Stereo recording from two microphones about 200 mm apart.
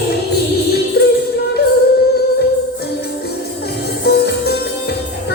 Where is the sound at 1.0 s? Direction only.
55° left (ahead or behind).